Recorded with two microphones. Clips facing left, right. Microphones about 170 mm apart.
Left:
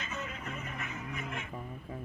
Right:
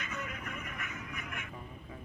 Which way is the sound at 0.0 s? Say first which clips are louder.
Left 1 dB; 25° left (ahead or behind).